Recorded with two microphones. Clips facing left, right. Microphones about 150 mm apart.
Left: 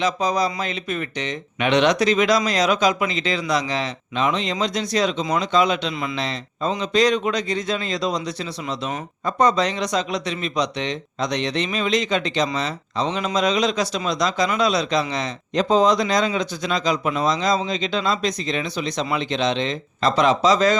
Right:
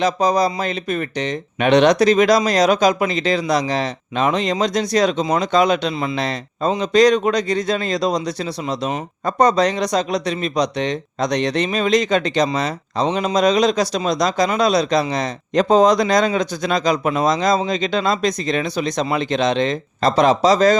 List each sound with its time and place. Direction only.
0.0 s speech: 40° right (ahead or behind)